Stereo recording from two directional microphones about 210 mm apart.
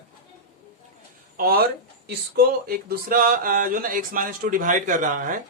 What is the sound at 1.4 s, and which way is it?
Speech, 45° right (ahead or behind).